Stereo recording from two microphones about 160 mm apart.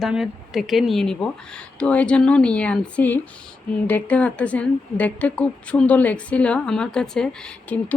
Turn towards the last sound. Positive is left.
turn(degrees=5)  # may be behind; listen again after turning